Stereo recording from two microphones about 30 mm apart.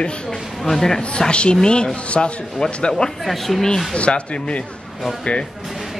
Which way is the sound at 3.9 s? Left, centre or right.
Left.